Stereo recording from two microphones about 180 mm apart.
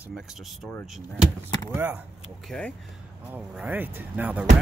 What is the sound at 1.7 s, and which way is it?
Speech, 10° right (ahead or behind).